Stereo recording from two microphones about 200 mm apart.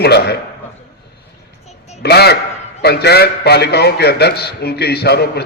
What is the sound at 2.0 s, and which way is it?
A man's voice, 55° left (ahead or behind).